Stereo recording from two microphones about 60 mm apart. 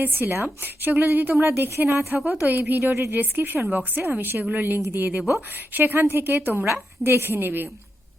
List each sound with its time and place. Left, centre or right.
0.0 s a woman's voice: right
1.4 s a woman's voice: right
4.2 s a woman's voice: right